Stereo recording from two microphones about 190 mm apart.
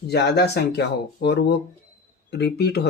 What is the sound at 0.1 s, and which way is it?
Speech, 60° left (ahead or behind).